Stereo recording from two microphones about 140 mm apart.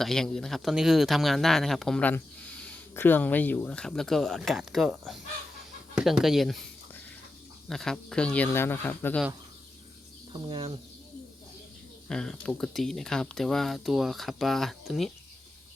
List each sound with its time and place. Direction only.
0.0 s speech: 5° left (ahead or behind)
7.7 s speech: 5° left (ahead or behind)
10.3 s speech: 35° right (ahead or behind)
12.0 s speech: 5° left (ahead or behind)